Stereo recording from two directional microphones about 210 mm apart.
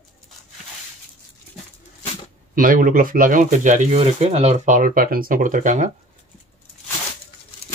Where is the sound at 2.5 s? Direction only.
40° right (ahead or behind).